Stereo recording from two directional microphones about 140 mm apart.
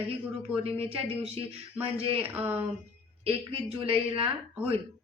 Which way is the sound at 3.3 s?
45° right (ahead or behind).